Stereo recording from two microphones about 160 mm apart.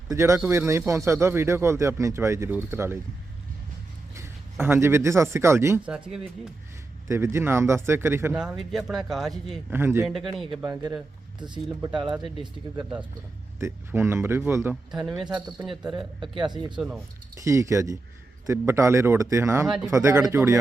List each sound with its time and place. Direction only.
0.1 s speech: 20° right (ahead or behind)
4.1 s speech: 15° right (ahead or behind)
5.9 s a man's voice: 5° right (ahead or behind)
7.1 s speech: 15° right (ahead or behind); by 9.6 s centre (ahead or behind)
9.6 s speech: 15° right (ahead or behind)
10.1 s a man's voice: centre (ahead or behind)
10.6 s a man's voice: 25° right (ahead or behind); by 16.3 s 5° right (ahead or behind)
16.3 s speech: 30° right (ahead or behind)
16.7 s a man's voice: 5° right (ahead or behind)
17.3 s speech: 20° right (ahead or behind)
19.6 s a man's voice: centre (ahead or behind)
19.9 s speech: 20° right (ahead or behind)